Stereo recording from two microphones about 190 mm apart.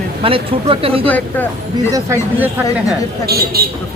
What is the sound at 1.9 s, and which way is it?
Speech, 10° right (ahead or behind).